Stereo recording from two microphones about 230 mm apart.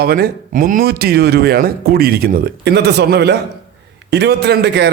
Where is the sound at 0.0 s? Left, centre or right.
Right.